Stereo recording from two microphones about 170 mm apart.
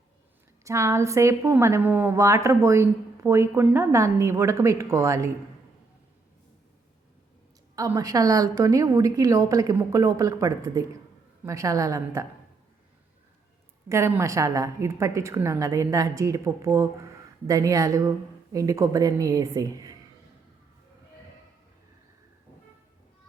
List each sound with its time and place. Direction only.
0.6 s a woman's voice: 15° right (ahead or behind)
7.8 s a woman's voice: 20° right (ahead or behind)
13.8 s a woman's voice: 15° right (ahead or behind)